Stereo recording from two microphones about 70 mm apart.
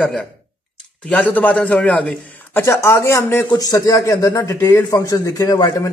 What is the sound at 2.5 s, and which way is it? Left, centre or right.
Speech, left.